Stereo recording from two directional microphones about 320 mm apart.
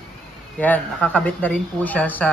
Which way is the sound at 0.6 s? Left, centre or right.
Centre.